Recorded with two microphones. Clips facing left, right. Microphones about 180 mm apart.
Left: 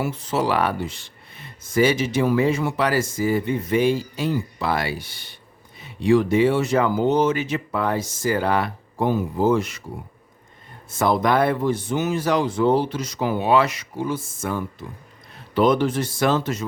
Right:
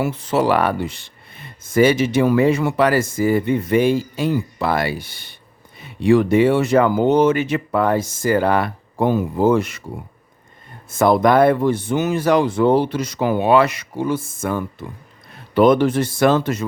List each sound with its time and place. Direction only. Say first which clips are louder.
0.0 s speech: right 5 dB; 65° right (ahead or behind)
10.8 s speech: right 5 dB; 55° right (ahead or behind)